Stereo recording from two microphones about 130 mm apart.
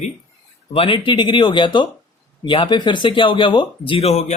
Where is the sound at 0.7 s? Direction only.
45° left (ahead or behind).